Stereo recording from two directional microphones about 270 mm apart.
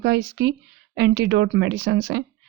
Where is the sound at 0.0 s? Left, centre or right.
Right.